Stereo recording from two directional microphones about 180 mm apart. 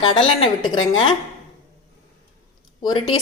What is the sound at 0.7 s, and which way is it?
Speech, 25° left (ahead or behind).